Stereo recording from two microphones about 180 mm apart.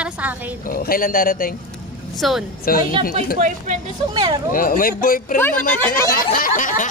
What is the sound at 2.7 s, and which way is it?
Speech, 55° left (ahead or behind).